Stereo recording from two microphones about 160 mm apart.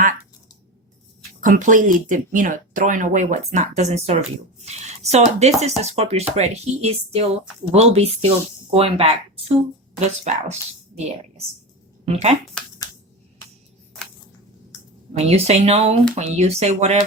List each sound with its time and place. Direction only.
1.5 s speech: 55° right (ahead or behind)
15.2 s speech: 40° right (ahead or behind)